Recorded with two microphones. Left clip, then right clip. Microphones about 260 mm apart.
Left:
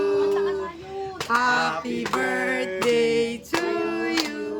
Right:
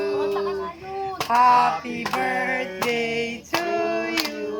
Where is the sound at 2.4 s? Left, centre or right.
Centre.